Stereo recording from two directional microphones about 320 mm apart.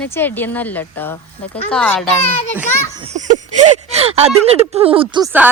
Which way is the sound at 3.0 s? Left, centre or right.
Right.